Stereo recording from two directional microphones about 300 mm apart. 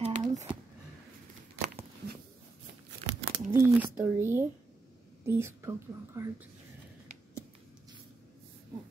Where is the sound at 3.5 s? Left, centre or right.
Centre.